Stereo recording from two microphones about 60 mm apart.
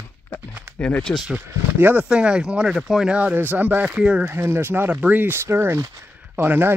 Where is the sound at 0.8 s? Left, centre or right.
Centre.